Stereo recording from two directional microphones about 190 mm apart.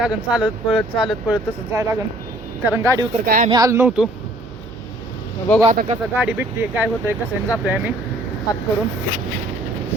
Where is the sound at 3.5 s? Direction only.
15° right (ahead or behind).